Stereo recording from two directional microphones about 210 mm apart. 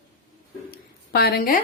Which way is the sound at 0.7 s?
50° left (ahead or behind).